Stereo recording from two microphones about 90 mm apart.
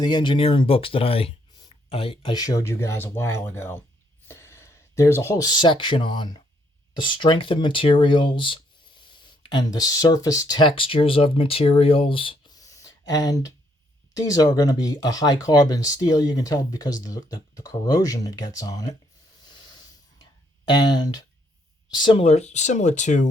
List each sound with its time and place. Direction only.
0.0 s speech: 60° left (ahead or behind); by 2.3 s 90° left
2.3 s speech: 45° left (ahead or behind)
2.6 s speech: 30° left (ahead or behind)
4.3 s a sound: 30° left (ahead or behind)
5.4 s speech: 55° left (ahead or behind)
10.6 s speech: 80° left
12.5 s a sound: 40° left (ahead or behind)
14.1 s speech: 45° left (ahead or behind)
20.7 s speech: 50° left (ahead or behind)